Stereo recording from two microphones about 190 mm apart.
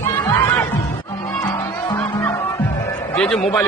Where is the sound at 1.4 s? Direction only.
20° left (ahead or behind).